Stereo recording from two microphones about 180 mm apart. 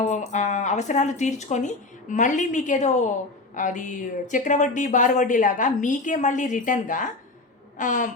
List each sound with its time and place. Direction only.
0.0 s a woman's voice: 40° left (ahead or behind)